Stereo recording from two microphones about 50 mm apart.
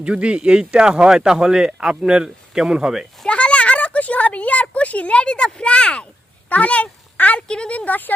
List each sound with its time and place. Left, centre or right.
0.0 s speech: right
3.2 s a woman's voice: left